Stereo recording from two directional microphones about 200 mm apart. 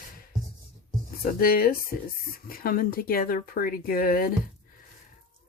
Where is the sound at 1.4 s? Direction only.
50° left (ahead or behind).